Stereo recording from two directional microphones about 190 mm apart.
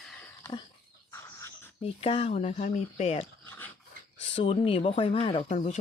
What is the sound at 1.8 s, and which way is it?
Speech, 30° left (ahead or behind).